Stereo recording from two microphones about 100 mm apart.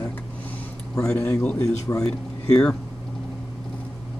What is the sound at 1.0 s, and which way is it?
Speech, 10° left (ahead or behind).